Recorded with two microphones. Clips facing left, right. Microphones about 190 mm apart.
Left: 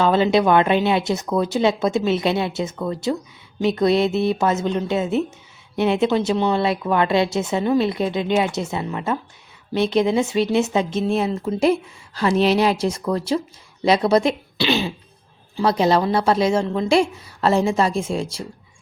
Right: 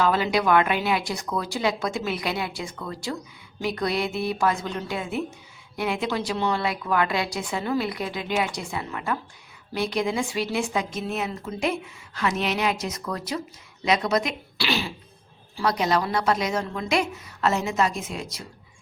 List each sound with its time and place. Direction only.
0.0 s speech: 25° left (ahead or behind)